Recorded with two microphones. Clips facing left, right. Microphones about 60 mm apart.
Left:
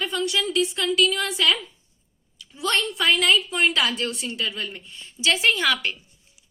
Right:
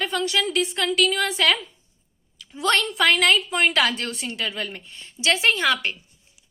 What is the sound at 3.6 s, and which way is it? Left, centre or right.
A woman's voice, right.